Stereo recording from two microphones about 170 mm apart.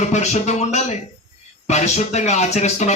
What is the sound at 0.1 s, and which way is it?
Speech, 40° left (ahead or behind).